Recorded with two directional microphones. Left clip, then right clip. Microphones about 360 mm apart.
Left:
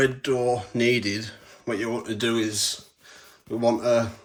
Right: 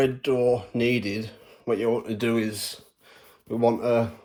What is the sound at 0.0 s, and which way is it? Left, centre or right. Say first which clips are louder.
Speech: even; centre.